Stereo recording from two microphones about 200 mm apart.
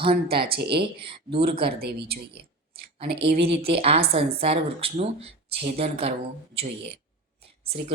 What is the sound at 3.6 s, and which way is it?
A woman's voice, 30° right (ahead or behind).